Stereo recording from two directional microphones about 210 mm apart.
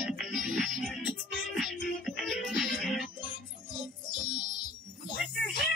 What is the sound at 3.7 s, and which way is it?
Music, 20° left (ahead or behind).